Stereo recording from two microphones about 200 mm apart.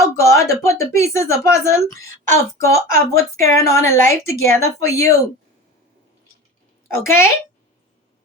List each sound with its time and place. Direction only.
0.0 s a sound: 15° left (ahead or behind)
0.6 s a woman's voice: 15° left (ahead or behind)
6.9 s a woman's voice: 10° left (ahead or behind)